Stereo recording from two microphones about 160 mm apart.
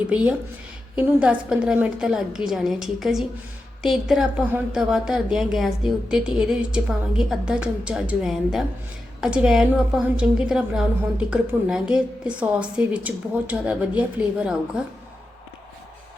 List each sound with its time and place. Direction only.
0.1 s a woman's voice: 5° right (ahead or behind)